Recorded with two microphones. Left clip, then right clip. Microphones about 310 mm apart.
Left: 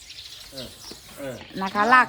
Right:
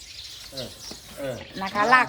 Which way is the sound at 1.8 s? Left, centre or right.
Left.